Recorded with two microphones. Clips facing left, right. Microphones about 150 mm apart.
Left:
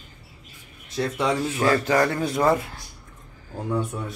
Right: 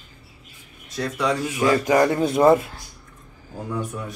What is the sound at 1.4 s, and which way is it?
Speech, 15° right (ahead or behind).